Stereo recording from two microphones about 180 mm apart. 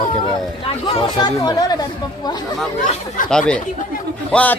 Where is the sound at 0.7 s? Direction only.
30° left (ahead or behind).